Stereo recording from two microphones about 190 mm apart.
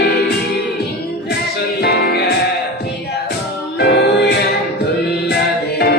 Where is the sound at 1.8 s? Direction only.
55° left (ahead or behind).